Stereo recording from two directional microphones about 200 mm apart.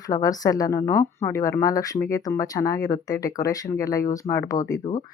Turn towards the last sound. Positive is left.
turn(degrees=15)  # may be behind; listen again after turning